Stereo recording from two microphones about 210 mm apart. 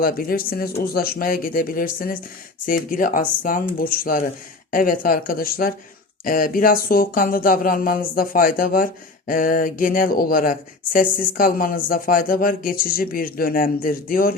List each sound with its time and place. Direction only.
0.0 s speech: 45° left (ahead or behind)